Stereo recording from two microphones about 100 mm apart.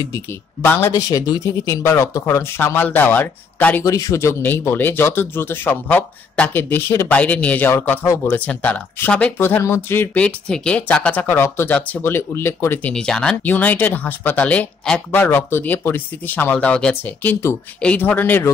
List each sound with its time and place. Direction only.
0.7 s speech: 20° left (ahead or behind)
0.9 s speech: 35° left (ahead or behind); by 3.8 s 15° left (ahead or behind)
3.8 s speech: 35° left (ahead or behind); by 9.3 s 10° left (ahead or behind)
9.4 s speech: 25° left (ahead or behind)
10.2 s speech: 10° left (ahead or behind)
12.9 s speech: 5° left (ahead or behind)